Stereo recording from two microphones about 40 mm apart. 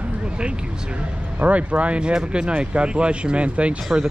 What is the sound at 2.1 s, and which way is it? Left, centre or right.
Speech, right.